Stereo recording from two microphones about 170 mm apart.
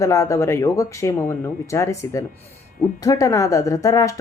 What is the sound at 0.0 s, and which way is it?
Speech, 15° left (ahead or behind).